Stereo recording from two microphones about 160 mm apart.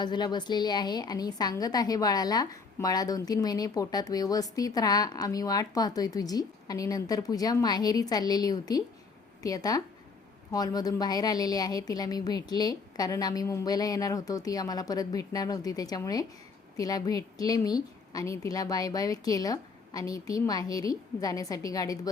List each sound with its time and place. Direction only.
0.0 s a woman's voice: 25° left (ahead or behind)